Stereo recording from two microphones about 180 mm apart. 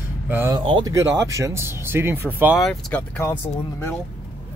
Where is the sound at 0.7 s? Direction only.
20° right (ahead or behind).